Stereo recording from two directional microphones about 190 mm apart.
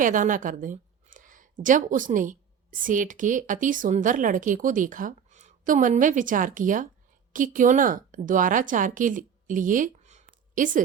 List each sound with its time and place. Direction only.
0.0 s a woman's voice: 45° right (ahead or behind)